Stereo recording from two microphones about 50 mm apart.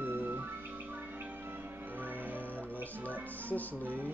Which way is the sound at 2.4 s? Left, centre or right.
Left.